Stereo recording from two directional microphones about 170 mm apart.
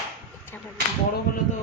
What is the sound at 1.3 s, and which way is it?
Speech, 60° left (ahead or behind).